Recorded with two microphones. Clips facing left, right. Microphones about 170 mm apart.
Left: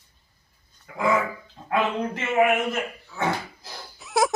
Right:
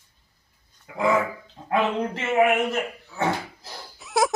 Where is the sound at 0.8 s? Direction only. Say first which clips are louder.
Right 1 dB; 20° right (ahead or behind).